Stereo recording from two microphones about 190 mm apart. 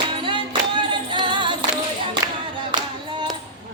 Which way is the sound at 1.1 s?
25° right (ahead or behind).